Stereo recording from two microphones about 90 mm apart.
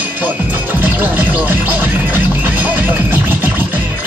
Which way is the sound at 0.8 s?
20° right (ahead or behind).